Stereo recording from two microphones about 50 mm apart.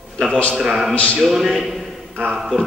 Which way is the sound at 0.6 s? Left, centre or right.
Centre.